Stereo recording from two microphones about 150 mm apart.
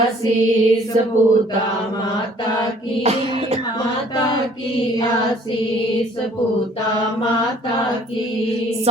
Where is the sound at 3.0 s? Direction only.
45° right (ahead or behind).